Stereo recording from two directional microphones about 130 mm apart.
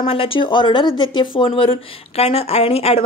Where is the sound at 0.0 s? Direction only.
45° left (ahead or behind).